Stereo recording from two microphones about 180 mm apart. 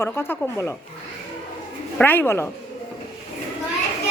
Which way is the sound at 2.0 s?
10° left (ahead or behind).